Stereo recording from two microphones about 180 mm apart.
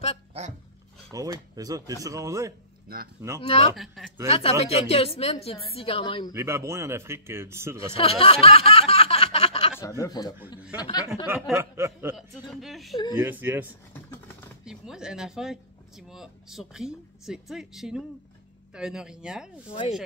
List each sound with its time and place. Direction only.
1.1 s a man's voice: 20° right (ahead or behind)
2.9 s speech: 55° right (ahead or behind)
3.4 s a woman's voice: 35° left (ahead or behind)
3.7 s speech: centre (ahead or behind)
4.3 s a woman's voice: 35° left (ahead or behind)
6.3 s a man's voice: 15° right (ahead or behind)
7.9 s a sound: 30° left (ahead or behind)
9.8 s speech: 20° left (ahead or behind)
11.2 s a man's voice: 10° right (ahead or behind)
12.2 s speech: centre (ahead or behind)
12.9 s speech: 25° left (ahead or behind)
13.2 s a man's voice: 10° right (ahead or behind)